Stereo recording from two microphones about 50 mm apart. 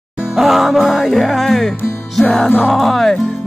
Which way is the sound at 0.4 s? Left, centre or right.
Centre.